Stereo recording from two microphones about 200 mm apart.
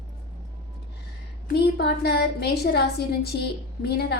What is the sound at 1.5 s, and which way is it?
A woman's voice, 55° left (ahead or behind).